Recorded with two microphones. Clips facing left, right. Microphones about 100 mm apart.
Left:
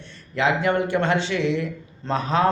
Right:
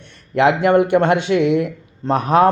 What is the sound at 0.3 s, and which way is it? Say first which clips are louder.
A man's voice: right 7 dB; 60° right (ahead or behind).